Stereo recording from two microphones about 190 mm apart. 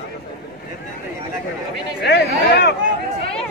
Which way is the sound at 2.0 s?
60° left (ahead or behind).